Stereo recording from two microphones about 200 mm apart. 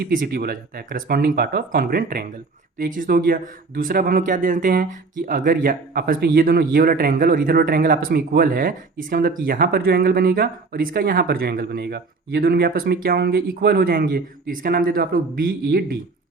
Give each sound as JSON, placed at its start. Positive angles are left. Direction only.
{"t": 0.0, "sound": "speech", "side_deg": -45}